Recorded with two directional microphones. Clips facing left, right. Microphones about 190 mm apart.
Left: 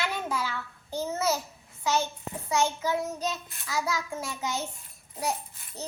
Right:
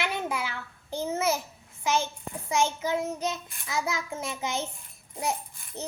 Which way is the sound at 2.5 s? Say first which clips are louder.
Even; 15° right (ahead or behind).